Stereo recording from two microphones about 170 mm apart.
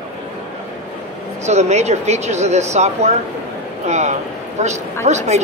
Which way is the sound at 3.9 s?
45° right (ahead or behind).